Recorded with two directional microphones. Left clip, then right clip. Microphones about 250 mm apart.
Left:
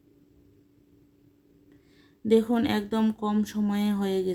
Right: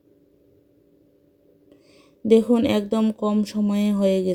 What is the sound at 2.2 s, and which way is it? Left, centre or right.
Speech, centre.